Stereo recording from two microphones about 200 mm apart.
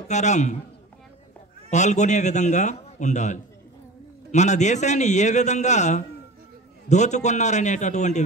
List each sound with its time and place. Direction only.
0.1 s a man's voice: 35° left (ahead or behind)
1.7 s a man's voice: 35° left (ahead or behind)